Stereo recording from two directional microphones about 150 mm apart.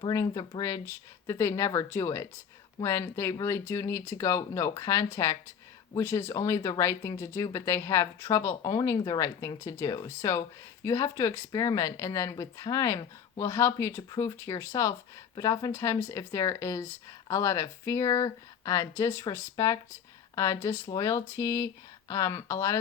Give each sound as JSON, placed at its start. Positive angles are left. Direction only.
{"t": 0.0, "sound": "speech", "side_deg": 25}